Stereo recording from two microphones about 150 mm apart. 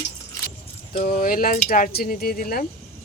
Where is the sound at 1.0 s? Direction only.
75° left (ahead or behind).